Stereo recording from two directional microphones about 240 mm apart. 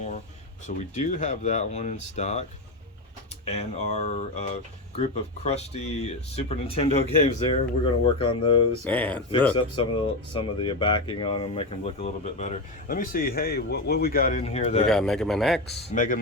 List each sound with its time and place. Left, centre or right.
0.8 s speech: left
3.5 s speech: left
8.8 s speech: centre
9.6 s speech: left
14.8 s speech: centre
15.9 s speech: left